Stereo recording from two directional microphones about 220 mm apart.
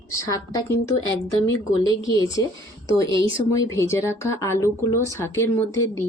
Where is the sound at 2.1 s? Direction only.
15° left (ahead or behind).